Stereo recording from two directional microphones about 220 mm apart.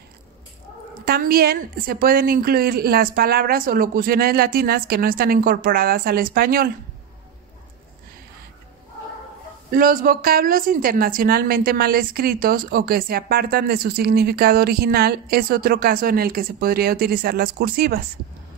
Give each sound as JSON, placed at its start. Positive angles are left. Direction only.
{"t": 1.0, "sound": "a woman's voice", "side_deg": -45}
{"t": 9.7, "sound": "a woman's voice", "side_deg": -40}